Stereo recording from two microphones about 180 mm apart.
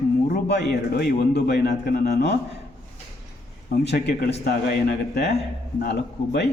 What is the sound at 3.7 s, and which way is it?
A man's voice, 70° left (ahead or behind).